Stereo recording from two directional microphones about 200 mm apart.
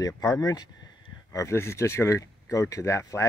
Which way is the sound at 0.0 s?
20° left (ahead or behind).